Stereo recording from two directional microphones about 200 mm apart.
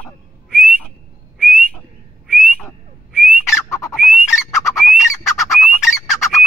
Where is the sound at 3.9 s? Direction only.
Centre (ahead or behind).